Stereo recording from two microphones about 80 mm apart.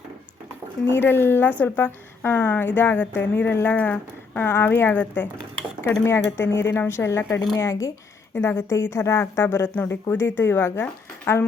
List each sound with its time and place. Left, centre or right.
0.9 s a woman's voice: left
6.1 s a woman's voice: left